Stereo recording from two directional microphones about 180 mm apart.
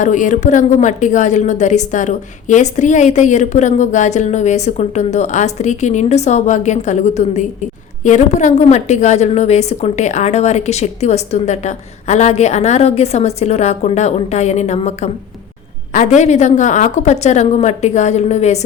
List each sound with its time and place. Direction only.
0.0 s a woman's voice: 45° left (ahead or behind)